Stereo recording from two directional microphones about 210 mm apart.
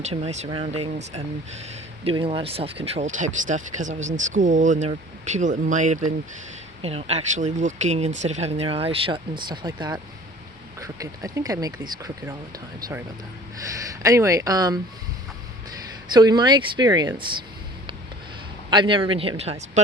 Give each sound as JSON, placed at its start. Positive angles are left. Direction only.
{"t": 0.0, "sound": "speech", "side_deg": -30}
{"t": 13.7, "sound": "speech", "side_deg": -15}
{"t": 16.1, "sound": "speech", "side_deg": -20}
{"t": 18.7, "sound": "speech", "side_deg": -20}